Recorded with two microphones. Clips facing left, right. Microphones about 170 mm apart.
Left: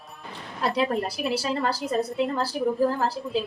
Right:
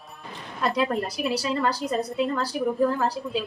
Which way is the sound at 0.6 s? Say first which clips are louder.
Even; 30° left (ahead or behind).